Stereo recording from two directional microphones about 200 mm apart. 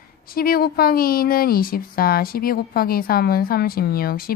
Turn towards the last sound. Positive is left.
turn(degrees=50)  # may be behind; listen again after turning